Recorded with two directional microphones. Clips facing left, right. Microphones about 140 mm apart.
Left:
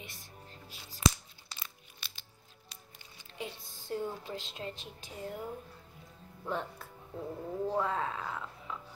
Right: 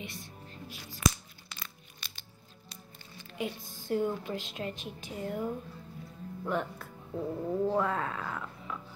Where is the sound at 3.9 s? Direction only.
65° right (ahead or behind).